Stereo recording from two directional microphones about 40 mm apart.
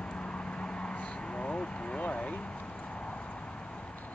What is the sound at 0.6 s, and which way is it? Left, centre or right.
Vehicle, left.